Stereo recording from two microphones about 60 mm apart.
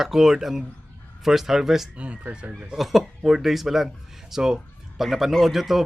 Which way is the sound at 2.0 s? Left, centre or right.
Centre.